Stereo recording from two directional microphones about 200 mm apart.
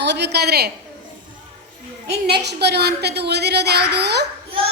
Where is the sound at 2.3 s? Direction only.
55° right (ahead or behind).